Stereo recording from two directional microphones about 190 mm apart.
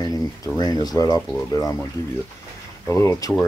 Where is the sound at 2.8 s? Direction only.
15° left (ahead or behind).